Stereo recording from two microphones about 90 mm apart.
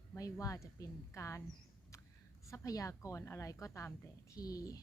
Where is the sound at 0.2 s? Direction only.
40° left (ahead or behind).